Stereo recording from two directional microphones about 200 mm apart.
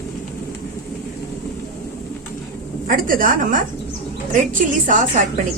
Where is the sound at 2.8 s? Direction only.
45° right (ahead or behind).